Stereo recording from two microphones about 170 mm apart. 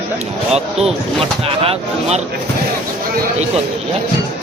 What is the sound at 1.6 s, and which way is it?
Speech, 35° right (ahead or behind).